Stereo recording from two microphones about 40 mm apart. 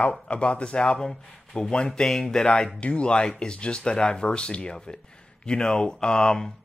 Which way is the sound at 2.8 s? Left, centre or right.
Left.